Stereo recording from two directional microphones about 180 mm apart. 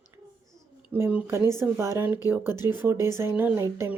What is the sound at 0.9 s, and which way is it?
Speech, 10° right (ahead or behind).